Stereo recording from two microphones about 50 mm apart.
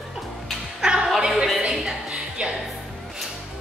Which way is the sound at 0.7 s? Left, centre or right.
Centre.